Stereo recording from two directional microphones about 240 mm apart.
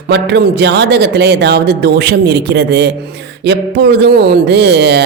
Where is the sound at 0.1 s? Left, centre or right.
Right.